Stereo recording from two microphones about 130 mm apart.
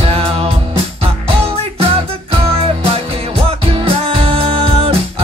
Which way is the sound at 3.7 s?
45° right (ahead or behind).